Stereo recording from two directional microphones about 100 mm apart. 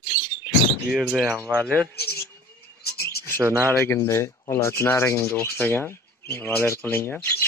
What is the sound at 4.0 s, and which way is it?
Speech, 30° left (ahead or behind).